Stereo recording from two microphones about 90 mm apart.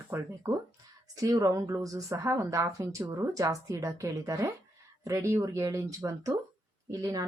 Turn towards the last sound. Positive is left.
turn(degrees=-45)  # may be behind; listen again after turning